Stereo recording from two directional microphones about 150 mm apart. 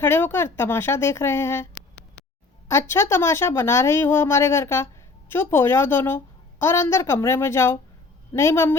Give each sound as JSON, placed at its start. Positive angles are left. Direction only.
{"t": 0.0, "sound": "a woman's voice", "side_deg": 15}